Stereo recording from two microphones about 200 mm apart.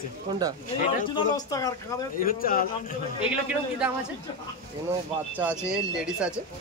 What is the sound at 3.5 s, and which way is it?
Speech, 5° right (ahead or behind).